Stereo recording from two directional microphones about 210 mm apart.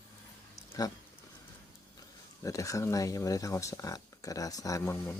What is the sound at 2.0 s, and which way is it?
Speech, 15° left (ahead or behind).